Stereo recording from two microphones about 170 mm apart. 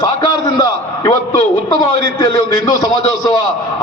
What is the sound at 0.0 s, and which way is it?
A man's voice, 20° left (ahead or behind).